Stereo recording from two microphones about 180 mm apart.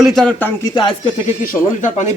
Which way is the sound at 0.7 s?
25° left (ahead or behind).